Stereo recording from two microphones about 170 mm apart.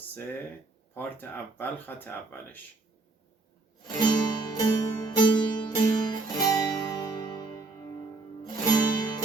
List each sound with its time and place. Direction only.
0.9 s speech: 10° left (ahead or behind)
4.0 s music: 25° left (ahead or behind)
8.7 s music: 25° left (ahead or behind)